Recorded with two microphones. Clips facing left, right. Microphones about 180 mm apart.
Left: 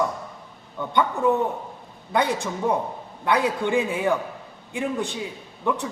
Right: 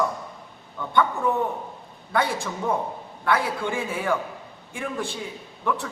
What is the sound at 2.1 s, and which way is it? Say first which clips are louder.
A man's voice: left 2 dB; 20° left (ahead or behind).